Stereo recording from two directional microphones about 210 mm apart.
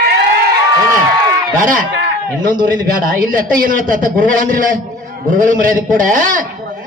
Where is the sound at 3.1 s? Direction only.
40° right (ahead or behind).